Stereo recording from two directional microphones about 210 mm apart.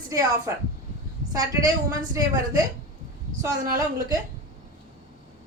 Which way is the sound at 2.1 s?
15° right (ahead or behind).